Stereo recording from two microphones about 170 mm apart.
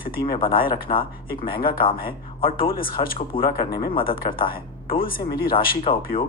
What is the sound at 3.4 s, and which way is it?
Speech, 30° left (ahead or behind).